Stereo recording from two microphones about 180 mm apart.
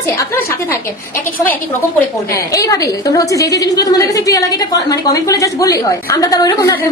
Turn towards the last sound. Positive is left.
turn(degrees=20)  # may be behind; listen again after turning